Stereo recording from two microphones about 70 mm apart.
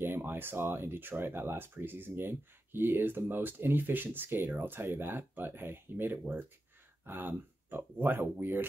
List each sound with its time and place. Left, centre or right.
0.0 s speech: right